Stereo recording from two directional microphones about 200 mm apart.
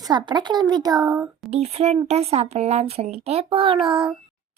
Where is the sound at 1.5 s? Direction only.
30° right (ahead or behind).